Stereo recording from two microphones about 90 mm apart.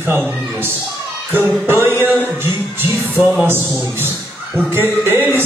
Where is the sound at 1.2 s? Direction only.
25° right (ahead or behind).